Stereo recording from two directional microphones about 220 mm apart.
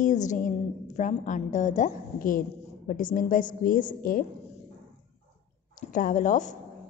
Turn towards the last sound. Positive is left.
turn(degrees=35)  # may be behind; listen again after turning